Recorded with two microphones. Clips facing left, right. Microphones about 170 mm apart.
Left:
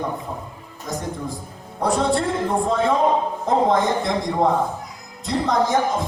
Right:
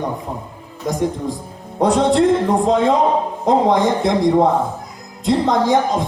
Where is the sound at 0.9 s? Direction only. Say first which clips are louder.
Right 8 dB; 20° right (ahead or behind).